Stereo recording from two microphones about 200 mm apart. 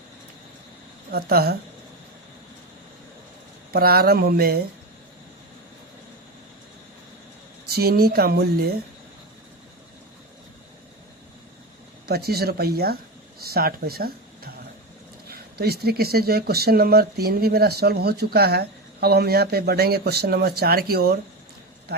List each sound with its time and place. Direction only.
1.1 s speech: 50° right (ahead or behind)
3.7 s speech: 50° right (ahead or behind)
7.7 s speech: 50° right (ahead or behind)
12.0 s speech: 50° right (ahead or behind)